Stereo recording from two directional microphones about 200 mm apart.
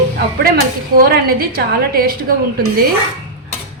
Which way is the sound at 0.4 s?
50° right (ahead or behind).